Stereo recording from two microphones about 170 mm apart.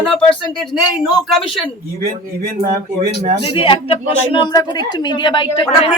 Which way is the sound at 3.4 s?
30° left (ahead or behind).